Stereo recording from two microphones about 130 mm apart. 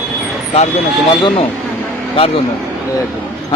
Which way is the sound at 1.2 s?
45° left (ahead or behind).